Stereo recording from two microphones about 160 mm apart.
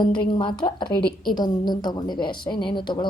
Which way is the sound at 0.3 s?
30° left (ahead or behind).